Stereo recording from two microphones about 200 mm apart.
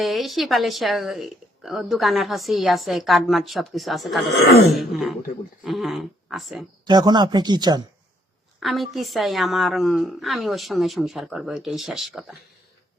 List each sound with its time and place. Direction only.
0.0 s speech: centre (ahead or behind)
4.3 s speech: 55° left (ahead or behind)
4.7 s speech: centre (ahead or behind)
6.8 s speech: 20° right (ahead or behind)
8.6 s speech: centre (ahead or behind)